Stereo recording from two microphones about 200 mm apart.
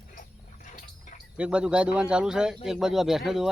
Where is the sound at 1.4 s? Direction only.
5° right (ahead or behind).